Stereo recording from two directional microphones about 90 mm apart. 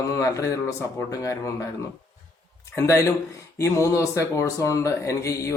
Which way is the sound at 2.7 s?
35° left (ahead or behind).